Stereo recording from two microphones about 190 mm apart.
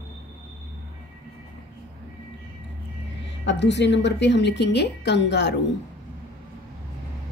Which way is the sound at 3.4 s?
65° left (ahead or behind).